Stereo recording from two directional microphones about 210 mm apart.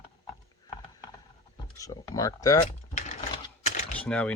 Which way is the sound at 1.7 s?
15° left (ahead or behind).